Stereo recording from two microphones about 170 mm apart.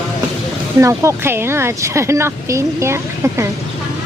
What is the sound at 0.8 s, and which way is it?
Speech, 15° right (ahead or behind).